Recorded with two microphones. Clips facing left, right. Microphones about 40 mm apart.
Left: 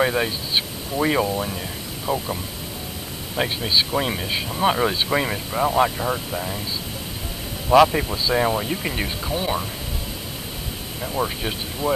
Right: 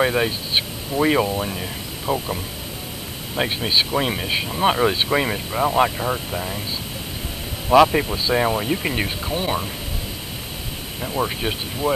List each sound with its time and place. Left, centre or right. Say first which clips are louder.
0.0 s speech: right 1 dB; centre
3.3 s speech: right 1 dB; centre
7.9 s speech: right 2 dB; centre
11.0 s speech: right 1 dB; centre
11.8 s speech: right 1 dB; right